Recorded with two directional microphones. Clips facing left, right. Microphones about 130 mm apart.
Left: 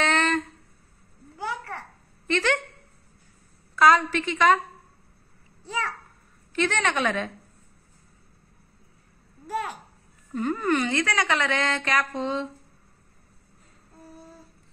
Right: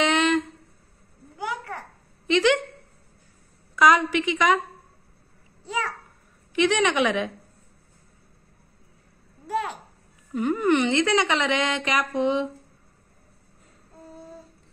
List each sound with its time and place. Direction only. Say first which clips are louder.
0.0 s a sound: right 3 dB; 15° right (ahead or behind)
2.2 s speech: right 5 dB; 15° right (ahead or behind)
3.7 s a woman's voice: even; 15° right (ahead or behind)
6.5 s a woman's voice: right 4 dB; 15° right (ahead or behind)
9.5 s a child's voice: right 3 dB; 20° right (ahead or behind)